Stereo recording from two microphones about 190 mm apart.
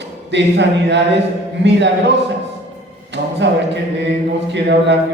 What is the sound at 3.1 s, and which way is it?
A man's voice, 65° right (ahead or behind).